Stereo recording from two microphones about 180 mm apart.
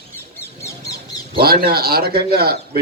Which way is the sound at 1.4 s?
60° right (ahead or behind).